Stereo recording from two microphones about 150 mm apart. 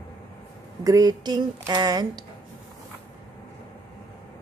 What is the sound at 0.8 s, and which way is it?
Speech, 25° right (ahead or behind).